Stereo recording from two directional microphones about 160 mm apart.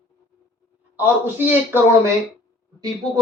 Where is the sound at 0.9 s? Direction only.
10° right (ahead or behind).